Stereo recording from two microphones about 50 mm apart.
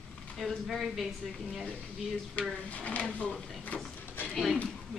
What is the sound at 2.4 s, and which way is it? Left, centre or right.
Speech, left.